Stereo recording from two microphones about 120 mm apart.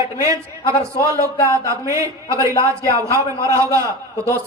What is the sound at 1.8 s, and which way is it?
A man's voice, 25° right (ahead or behind).